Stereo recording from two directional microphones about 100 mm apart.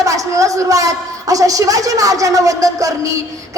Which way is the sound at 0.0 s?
35° right (ahead or behind).